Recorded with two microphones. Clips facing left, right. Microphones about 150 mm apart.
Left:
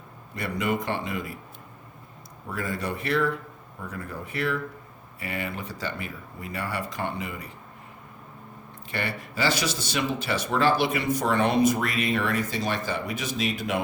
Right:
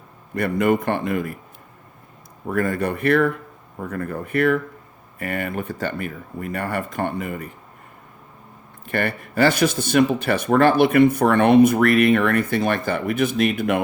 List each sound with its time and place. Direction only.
0.3 s speech: 55° right (ahead or behind)
2.5 s speech: 55° right (ahead or behind)
8.9 s speech: 55° right (ahead or behind)